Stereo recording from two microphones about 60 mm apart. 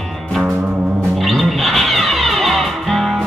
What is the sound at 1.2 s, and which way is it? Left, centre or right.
Music, centre.